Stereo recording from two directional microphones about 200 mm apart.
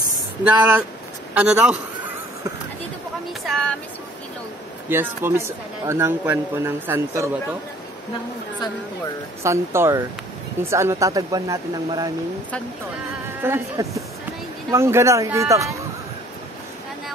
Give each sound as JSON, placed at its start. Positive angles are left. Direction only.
{"t": 0.4, "sound": "speech", "side_deg": -5}
{"t": 3.4, "sound": "speech", "side_deg": 0}
{"t": 4.8, "sound": "speech", "side_deg": -10}
{"t": 9.4, "sound": "speech", "side_deg": -15}
{"t": 13.4, "sound": "speech", "side_deg": -10}